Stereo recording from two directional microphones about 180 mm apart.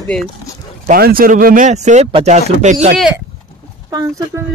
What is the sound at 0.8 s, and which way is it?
Speech, 55° right (ahead or behind).